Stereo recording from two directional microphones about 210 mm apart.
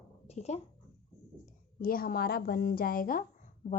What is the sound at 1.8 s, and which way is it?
A woman's voice, 45° left (ahead or behind).